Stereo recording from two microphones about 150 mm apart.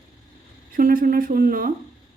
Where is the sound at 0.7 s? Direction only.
65° right (ahead or behind).